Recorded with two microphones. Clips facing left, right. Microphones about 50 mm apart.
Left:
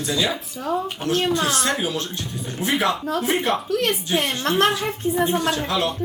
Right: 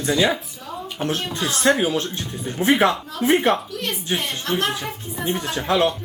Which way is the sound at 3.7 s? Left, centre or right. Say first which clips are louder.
Left 7 dB; left.